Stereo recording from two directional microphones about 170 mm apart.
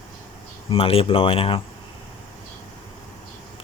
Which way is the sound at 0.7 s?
35° left (ahead or behind).